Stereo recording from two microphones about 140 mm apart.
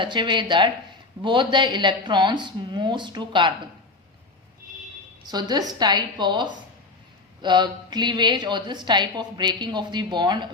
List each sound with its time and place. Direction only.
0.0 s a woman's voice: 35° right (ahead or behind)
5.3 s a woman's voice: 30° right (ahead or behind)